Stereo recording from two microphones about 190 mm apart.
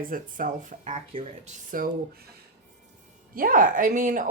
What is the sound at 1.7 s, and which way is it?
Speech, 45° right (ahead or behind).